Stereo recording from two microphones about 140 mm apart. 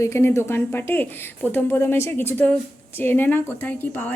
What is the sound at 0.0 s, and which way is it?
Speech, 20° left (ahead or behind).